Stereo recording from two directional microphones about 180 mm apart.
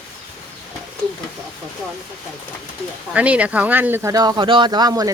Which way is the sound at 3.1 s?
10° right (ahead or behind).